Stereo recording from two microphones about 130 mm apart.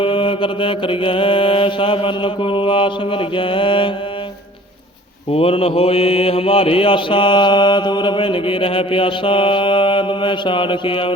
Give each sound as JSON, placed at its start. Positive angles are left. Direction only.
{"t": 0.0, "sound": "mantra", "side_deg": 40}
{"t": 5.3, "sound": "mantra", "side_deg": 45}